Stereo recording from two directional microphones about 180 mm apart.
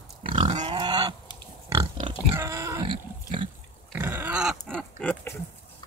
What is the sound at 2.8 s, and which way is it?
Pig, 30° right (ahead or behind).